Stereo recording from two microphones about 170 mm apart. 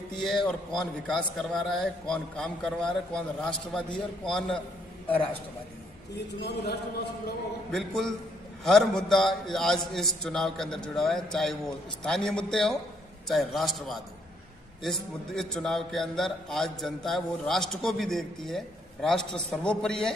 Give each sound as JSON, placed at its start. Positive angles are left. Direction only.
{"t": 0.5, "sound": "a man's voice", "side_deg": 5}
{"t": 6.4, "sound": "a man's voice", "side_deg": 75}
{"t": 7.7, "sound": "a man's voice", "side_deg": 0}